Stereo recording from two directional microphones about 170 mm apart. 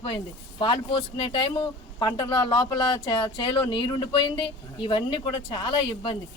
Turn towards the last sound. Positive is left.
turn(degrees=30)  # may be behind; listen again after turning